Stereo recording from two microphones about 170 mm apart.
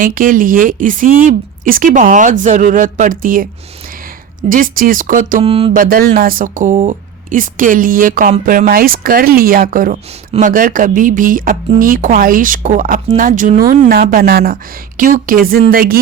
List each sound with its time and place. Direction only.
0.0 s speech: 55° right (ahead or behind)
5.4 s a sound: 35° right (ahead or behind)
5.7 s speech: 60° right (ahead or behind)